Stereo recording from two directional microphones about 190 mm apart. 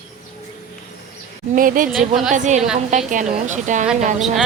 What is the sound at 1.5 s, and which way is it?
Speech, 45° right (ahead or behind).